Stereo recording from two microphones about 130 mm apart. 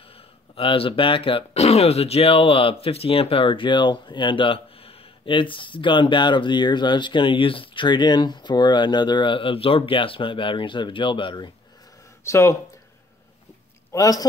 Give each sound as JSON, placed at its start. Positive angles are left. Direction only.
{"t": 0.6, "sound": "speech", "side_deg": 45}
{"t": 12.3, "sound": "speech", "side_deg": 25}
{"t": 13.9, "sound": "speech", "side_deg": 25}